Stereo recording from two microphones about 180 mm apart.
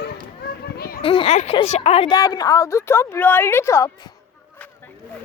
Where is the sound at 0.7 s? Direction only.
55° left (ahead or behind).